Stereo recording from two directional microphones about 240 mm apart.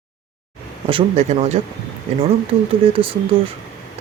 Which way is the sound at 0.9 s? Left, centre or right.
Right.